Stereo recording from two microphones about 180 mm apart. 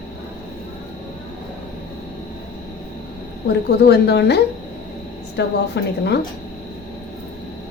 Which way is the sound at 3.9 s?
65° left (ahead or behind).